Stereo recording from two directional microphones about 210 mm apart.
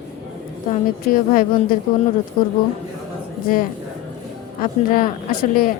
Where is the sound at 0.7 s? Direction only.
40° left (ahead or behind).